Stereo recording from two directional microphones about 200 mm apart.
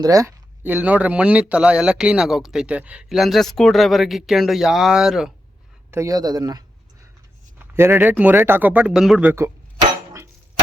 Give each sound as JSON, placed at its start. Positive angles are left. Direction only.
{"t": 0.0, "sound": "speech", "side_deg": -15}
{"t": 5.9, "sound": "a man's voice", "side_deg": -15}